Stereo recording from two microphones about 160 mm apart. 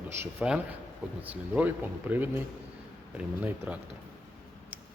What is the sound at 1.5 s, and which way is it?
Speech, 10° right (ahead or behind).